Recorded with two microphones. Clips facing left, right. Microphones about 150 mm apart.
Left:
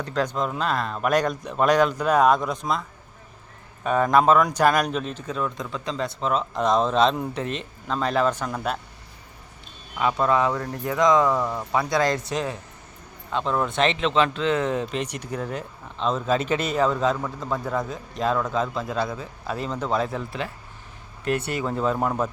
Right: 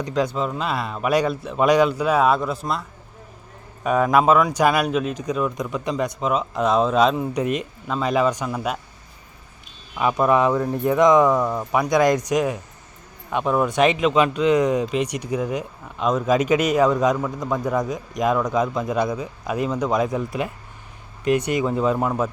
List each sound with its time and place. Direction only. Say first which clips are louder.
0.0 s speech: right 3 dB; 10° right (ahead or behind)
3.8 s speech: right 1 dB; 5° right (ahead or behind)
10.0 s speech: right 3 dB; 15° right (ahead or behind)